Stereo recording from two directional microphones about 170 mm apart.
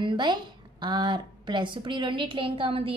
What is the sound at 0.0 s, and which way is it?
A woman's voice, 25° right (ahead or behind).